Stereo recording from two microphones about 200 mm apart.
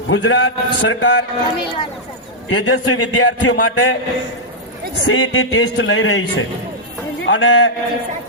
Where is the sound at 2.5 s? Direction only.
70° left (ahead or behind).